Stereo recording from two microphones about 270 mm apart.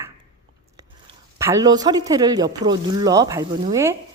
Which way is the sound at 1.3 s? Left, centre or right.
Centre.